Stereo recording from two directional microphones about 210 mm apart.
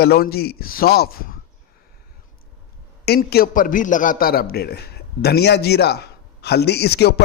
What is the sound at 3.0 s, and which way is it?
A man's voice, 50° left (ahead or behind).